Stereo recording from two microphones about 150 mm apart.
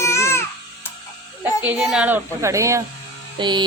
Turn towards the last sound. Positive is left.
turn(degrees=-30)  # may be behind; listen again after turning